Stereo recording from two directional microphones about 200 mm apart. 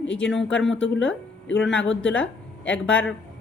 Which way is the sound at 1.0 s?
5° left (ahead or behind).